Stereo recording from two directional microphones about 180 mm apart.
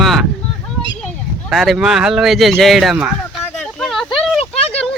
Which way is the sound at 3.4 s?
5° left (ahead or behind).